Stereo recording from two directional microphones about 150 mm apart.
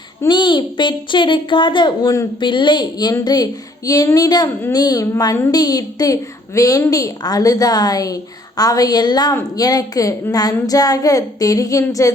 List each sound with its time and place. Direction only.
0.3 s a woman's voice: 30° left (ahead or behind)